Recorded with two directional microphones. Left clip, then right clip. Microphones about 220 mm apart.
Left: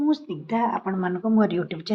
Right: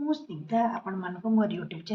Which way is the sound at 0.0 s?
35° left (ahead or behind).